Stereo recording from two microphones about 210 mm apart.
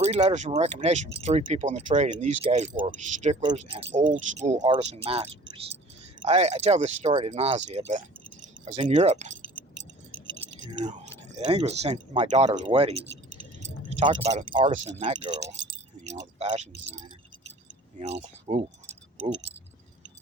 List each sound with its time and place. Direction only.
0.0 s speech: 30° right (ahead or behind)
11.3 s speech: 30° right (ahead or behind)
17.9 s speech: 30° right (ahead or behind)